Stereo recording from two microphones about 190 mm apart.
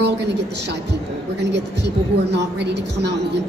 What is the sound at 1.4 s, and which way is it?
A woman's voice, 65° right (ahead or behind).